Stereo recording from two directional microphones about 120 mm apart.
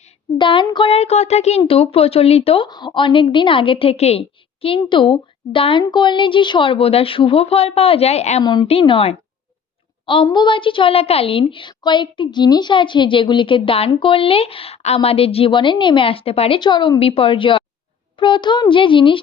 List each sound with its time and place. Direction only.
0.3 s a woman's voice: 45° left (ahead or behind)
2.6 s a woman's voice: 40° left (ahead or behind); by 8.4 s 65° left (ahead or behind)
8.4 s a woman's voice: 40° left (ahead or behind)
10.2 s a woman's voice: 40° left (ahead or behind)
17.0 s a woman's voice: 50° left (ahead or behind)